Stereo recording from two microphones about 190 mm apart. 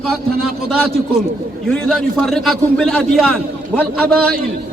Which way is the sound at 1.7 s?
5° left (ahead or behind).